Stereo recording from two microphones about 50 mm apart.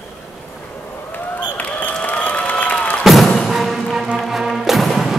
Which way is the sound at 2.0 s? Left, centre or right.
Left.